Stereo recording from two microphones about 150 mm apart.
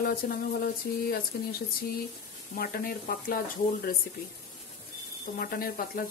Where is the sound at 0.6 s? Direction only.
90° left.